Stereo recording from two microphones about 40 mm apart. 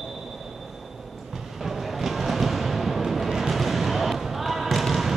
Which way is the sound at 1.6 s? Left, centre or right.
Centre.